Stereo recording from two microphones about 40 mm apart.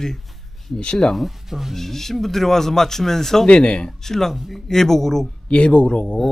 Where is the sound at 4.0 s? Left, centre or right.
Centre.